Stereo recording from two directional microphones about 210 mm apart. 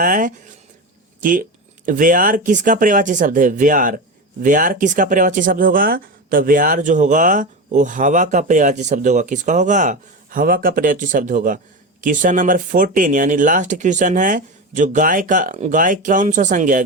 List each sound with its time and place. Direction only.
0.0 s speech: 40° right (ahead or behind)